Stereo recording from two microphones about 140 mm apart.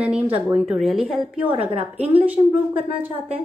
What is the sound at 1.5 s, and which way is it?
Speech, 45° right (ahead or behind).